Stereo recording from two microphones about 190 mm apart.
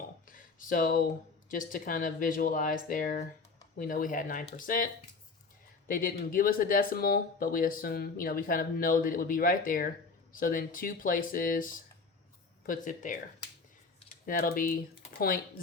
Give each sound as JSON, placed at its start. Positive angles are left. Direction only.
{"t": 0.3, "sound": "speech", "side_deg": 45}
{"t": 5.9, "sound": "speech", "side_deg": 45}
{"t": 14.3, "sound": "speech", "side_deg": 50}